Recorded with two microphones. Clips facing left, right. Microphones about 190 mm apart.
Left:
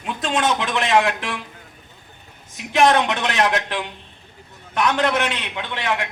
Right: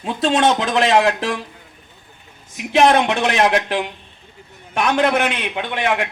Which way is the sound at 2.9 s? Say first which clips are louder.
Right 3 dB; 15° right (ahead or behind).